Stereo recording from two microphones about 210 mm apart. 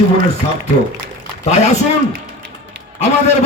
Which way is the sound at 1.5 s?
30° left (ahead or behind).